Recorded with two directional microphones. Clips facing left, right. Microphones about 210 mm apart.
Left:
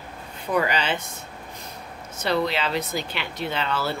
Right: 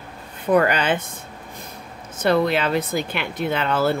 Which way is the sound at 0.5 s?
50° right (ahead or behind).